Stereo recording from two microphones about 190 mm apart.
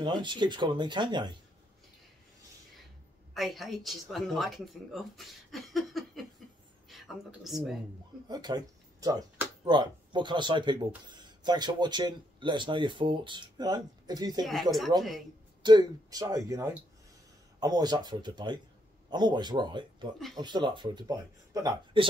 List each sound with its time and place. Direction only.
0.0 s speech: 25° right (ahead or behind)
3.3 s speech: centre (ahead or behind)
8.3 s speech: 20° right (ahead or behind)
14.4 s speech: centre (ahead or behind)
14.9 s speech: 20° right (ahead or behind)